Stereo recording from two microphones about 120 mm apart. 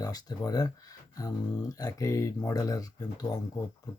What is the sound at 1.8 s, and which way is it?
Speech, 25° left (ahead or behind).